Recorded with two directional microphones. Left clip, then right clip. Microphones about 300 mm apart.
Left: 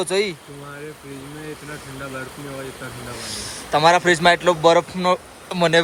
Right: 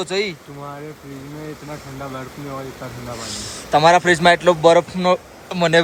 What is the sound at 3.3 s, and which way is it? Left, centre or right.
A man's voice, centre.